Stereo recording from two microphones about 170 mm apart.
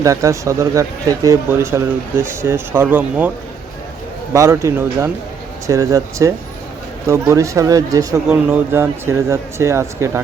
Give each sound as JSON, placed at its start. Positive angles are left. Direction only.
{"t": 0.0, "sound": "speech", "side_deg": -20}
{"t": 4.4, "sound": "speech", "side_deg": -15}